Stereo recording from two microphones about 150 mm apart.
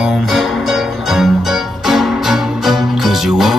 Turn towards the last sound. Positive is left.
turn(degrees=0)  # may be behind; listen again after turning